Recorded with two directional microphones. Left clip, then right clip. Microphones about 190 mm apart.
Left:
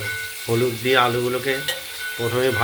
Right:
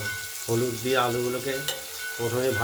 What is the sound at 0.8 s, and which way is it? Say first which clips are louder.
Speech: left 7 dB; 20° left (ahead or behind).